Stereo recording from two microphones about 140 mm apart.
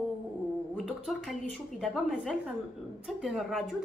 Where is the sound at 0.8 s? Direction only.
Centre (ahead or behind).